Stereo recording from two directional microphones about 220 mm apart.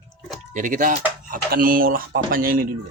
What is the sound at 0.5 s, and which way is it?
Speech, 35° right (ahead or behind).